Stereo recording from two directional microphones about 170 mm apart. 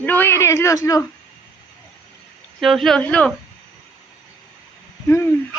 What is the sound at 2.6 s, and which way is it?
Speech, centre (ahead or behind).